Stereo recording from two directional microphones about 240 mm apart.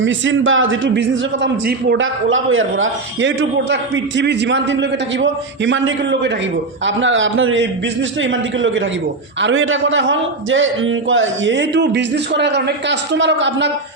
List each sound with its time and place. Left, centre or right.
0.0 s a man's voice: right